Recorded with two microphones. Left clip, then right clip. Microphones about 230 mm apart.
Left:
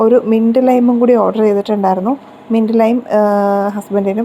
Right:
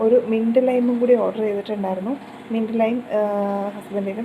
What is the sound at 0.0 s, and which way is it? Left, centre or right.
A woman's voice, left.